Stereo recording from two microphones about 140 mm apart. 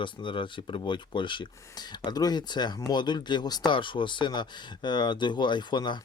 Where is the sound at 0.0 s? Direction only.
35° left (ahead or behind).